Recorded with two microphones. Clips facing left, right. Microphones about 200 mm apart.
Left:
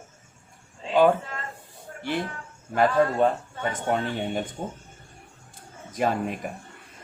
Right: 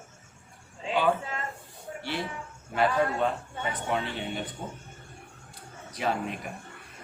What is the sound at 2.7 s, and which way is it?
Speech, 45° left (ahead or behind).